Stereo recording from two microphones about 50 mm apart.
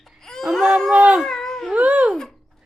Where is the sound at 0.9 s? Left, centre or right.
Right.